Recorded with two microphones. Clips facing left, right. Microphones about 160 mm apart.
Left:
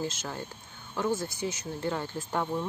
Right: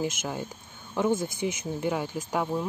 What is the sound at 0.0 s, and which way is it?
Speech, 15° right (ahead or behind).